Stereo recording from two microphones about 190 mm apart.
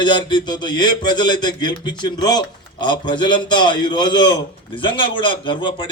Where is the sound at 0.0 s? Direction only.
25° left (ahead or behind).